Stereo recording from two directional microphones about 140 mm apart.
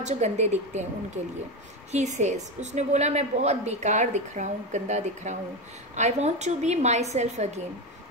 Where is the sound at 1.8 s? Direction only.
55° right (ahead or behind).